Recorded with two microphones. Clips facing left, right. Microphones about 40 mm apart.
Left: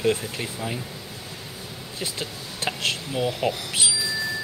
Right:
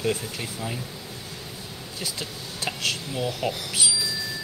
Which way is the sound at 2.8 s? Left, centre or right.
Left.